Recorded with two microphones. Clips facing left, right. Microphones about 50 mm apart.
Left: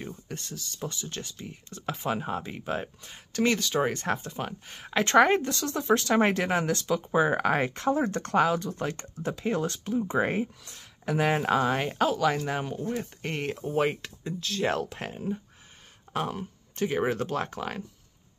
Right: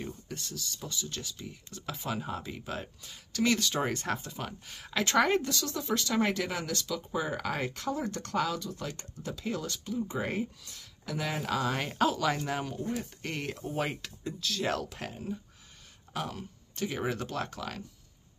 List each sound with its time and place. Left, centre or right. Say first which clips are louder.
0.0 s a sound: left 2 dB; left
0.7 s speech: left 7 dB; left
1.1 s speech: left 2 dB; left
3.5 s speech: left 4 dB; centre; by 11.7 s left
11.7 s speech: left 3 dB; centre